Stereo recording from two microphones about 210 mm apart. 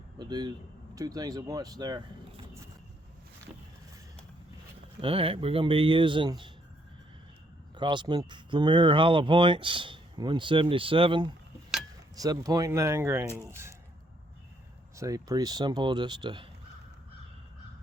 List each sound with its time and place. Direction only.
0.2 s speech: 20° right (ahead or behind)
4.9 s speech: 25° right (ahead or behind)
7.8 s speech: 20° right (ahead or behind)
14.9 s speech: 15° right (ahead or behind)